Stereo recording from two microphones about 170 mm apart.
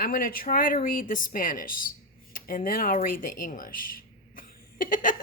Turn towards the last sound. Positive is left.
turn(degrees=50)  # may be behind; listen again after turning